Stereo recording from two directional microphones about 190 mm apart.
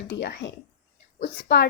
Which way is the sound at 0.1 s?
60° left (ahead or behind).